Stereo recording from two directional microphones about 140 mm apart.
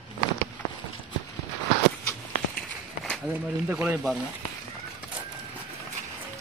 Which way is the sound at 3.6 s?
15° right (ahead or behind).